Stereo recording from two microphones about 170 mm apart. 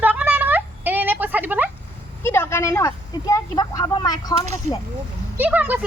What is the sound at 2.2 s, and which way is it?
Speech, 15° left (ahead or behind).